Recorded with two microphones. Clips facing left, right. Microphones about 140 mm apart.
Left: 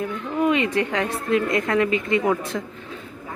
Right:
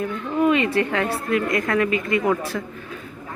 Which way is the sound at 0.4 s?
20° left (ahead or behind).